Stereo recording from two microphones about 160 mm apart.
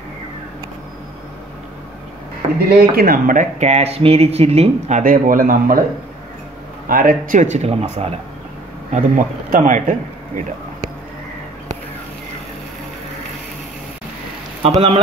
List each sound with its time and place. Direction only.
2.7 s speech: 70° right (ahead or behind)
6.9 s speech: 60° right (ahead or behind)
14.6 s speech: 40° right (ahead or behind)